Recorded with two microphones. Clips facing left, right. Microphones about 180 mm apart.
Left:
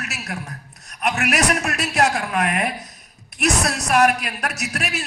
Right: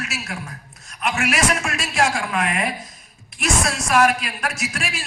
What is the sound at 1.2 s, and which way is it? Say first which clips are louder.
Speech: even; 65° left (ahead or behind).